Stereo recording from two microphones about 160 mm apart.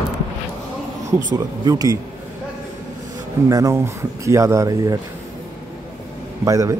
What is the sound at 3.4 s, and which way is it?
A man's voice, 20° right (ahead or behind).